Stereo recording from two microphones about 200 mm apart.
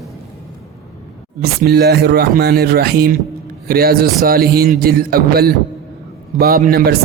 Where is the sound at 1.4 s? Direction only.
50° right (ahead or behind).